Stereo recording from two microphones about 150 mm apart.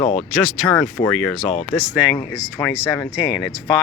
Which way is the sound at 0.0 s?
45° left (ahead or behind).